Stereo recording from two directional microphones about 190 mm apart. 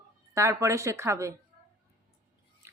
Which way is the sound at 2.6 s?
15° right (ahead or behind).